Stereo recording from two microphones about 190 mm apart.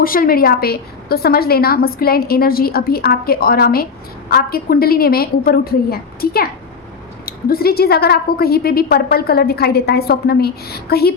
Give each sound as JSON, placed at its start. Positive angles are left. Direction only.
{"t": 0.0, "sound": "a woman's voice", "side_deg": 50}